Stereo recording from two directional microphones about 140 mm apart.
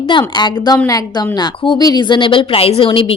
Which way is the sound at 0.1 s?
30° left (ahead or behind).